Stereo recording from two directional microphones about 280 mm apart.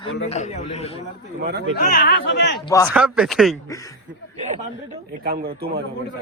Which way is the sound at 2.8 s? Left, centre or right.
Centre.